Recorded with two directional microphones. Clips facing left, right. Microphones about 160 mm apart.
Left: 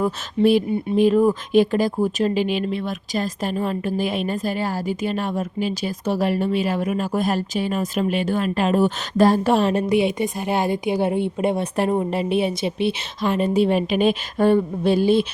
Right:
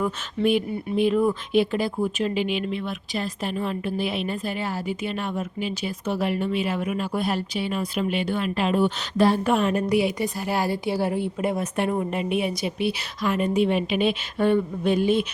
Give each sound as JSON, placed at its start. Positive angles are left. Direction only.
{"t": 0.0, "sound": "speech", "side_deg": 35}